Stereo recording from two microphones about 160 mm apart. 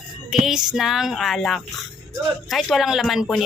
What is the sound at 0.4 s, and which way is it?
Speech, 5° right (ahead or behind).